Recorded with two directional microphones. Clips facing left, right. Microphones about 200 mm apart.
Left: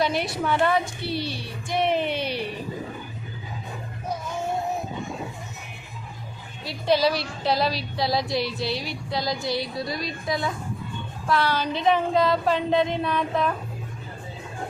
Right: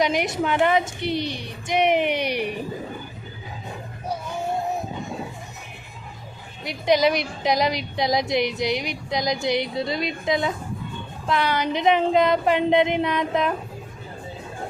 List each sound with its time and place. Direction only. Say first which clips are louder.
0.0 s a woman's voice: right 2 dB; 15° right (ahead or behind)
6.7 s a woman's voice: right 2 dB; 15° right (ahead or behind)